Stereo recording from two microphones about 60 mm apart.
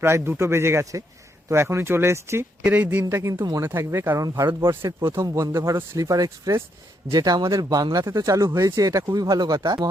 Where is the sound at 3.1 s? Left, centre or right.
Right.